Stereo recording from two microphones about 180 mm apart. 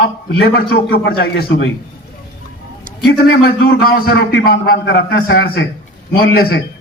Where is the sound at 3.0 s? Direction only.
60° left (ahead or behind).